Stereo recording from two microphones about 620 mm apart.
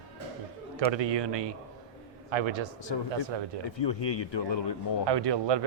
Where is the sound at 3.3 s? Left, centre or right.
Right.